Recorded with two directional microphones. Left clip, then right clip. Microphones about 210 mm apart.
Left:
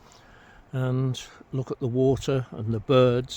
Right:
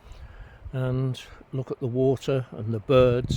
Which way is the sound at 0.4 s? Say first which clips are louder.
Even; 10° left (ahead or behind).